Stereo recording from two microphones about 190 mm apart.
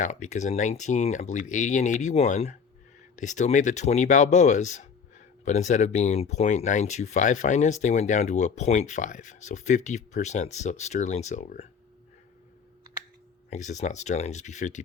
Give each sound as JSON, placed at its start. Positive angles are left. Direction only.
{"t": 0.0, "sound": "speech", "side_deg": 40}
{"t": 13.5, "sound": "speech", "side_deg": 40}